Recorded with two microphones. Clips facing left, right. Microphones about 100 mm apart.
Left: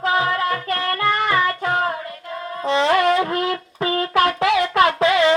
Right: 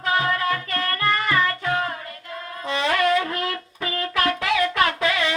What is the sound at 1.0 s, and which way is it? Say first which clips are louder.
Music: left 3 dB; 20° left (ahead or behind).